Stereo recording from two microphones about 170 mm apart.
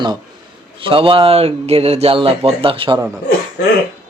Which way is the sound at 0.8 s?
30° right (ahead or behind).